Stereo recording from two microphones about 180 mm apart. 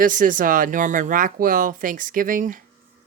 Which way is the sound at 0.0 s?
50° right (ahead or behind).